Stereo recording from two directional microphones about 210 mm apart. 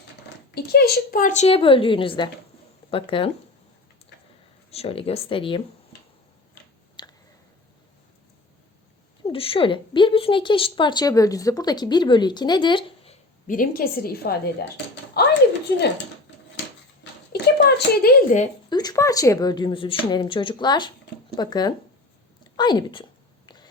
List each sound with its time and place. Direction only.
0.5 s a woman's voice: 50° left (ahead or behind); by 3.3 s 25° left (ahead or behind)
4.7 s a woman's voice: 30° left (ahead or behind)
7.0 s a sound: 20° left (ahead or behind)
9.2 s a woman's voice: 25° left (ahead or behind)
13.5 s a woman's voice: 40° left (ahead or behind)
17.3 s speech: 50° left (ahead or behind)
18.3 s speech: 35° left (ahead or behind)
18.7 s a woman's voice: 20° left (ahead or behind)